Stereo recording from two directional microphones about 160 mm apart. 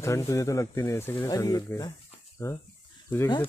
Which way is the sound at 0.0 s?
20° left (ahead or behind).